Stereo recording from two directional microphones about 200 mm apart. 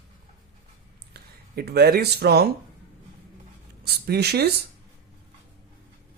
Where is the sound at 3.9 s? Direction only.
55° right (ahead or behind).